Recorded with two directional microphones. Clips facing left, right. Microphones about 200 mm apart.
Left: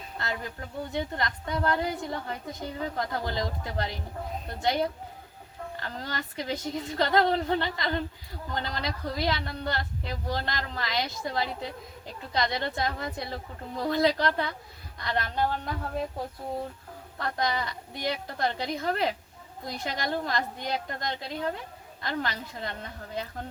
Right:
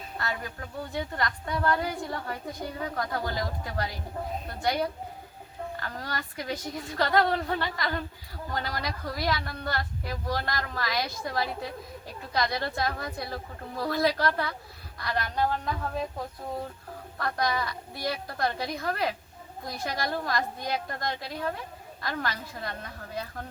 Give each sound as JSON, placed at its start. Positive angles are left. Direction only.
{"t": 0.2, "sound": "a woman's voice", "side_deg": 20}
{"t": 17.2, "sound": "speech", "side_deg": 20}